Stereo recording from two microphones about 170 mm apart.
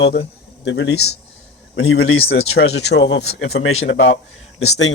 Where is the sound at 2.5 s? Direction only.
75° left (ahead or behind).